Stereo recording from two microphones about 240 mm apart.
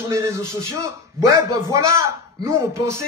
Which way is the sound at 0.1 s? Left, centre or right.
Centre.